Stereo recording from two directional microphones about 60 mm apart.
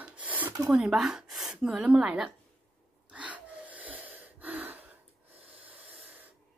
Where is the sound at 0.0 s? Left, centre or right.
Right.